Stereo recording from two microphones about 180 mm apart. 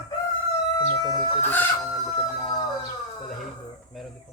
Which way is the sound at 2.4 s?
20° left (ahead or behind).